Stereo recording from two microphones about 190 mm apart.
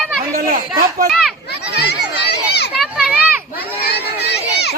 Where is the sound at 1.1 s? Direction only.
Centre (ahead or behind).